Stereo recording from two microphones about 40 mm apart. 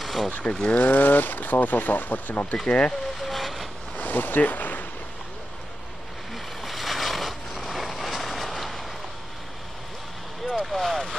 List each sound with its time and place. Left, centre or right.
0.0 s vehicle: centre
0.4 s speech: left
0.7 s speech: left
2.7 s speech: left
3.2 s vehicle: centre
3.9 s ocean: left
6.3 s vehicle: centre
10.6 s vehicle: centre